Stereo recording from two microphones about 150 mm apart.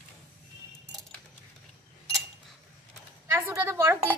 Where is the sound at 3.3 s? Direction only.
15° right (ahead or behind).